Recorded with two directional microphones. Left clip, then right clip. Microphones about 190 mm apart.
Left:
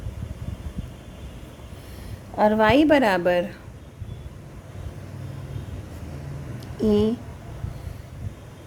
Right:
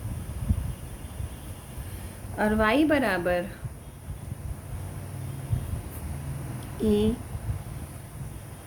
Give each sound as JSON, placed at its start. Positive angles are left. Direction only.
{"t": 2.4, "sound": "a woman's voice", "side_deg": 30}
{"t": 6.8, "sound": "a woman's voice", "side_deg": 35}